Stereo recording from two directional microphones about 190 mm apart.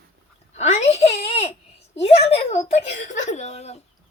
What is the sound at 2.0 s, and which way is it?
Speech, 30° left (ahead or behind).